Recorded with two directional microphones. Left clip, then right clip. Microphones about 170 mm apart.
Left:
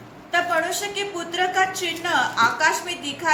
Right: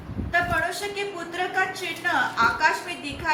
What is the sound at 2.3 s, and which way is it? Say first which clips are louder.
Speech: left 1 dB; 55° left (ahead or behind).